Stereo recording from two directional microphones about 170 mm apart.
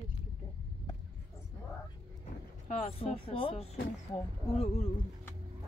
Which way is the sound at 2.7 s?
35° left (ahead or behind).